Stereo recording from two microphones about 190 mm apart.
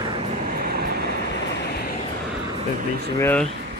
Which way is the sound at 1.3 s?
60° left (ahead or behind).